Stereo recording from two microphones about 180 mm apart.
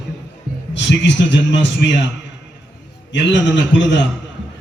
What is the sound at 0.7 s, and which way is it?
A man's voice, 80° left.